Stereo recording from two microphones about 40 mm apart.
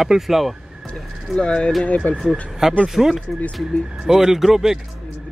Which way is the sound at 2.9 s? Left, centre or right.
Centre.